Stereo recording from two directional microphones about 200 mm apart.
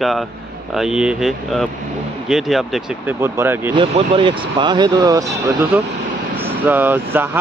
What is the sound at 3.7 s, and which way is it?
Speech, 25° right (ahead or behind).